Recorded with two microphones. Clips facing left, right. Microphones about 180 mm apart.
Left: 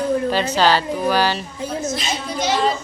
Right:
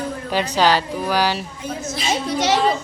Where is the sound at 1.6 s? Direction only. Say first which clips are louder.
Left 5 dB; 30° left (ahead or behind).